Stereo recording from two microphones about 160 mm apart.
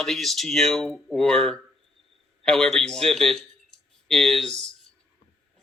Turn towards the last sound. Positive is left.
turn(degrees=5)  # may be behind; listen again after turning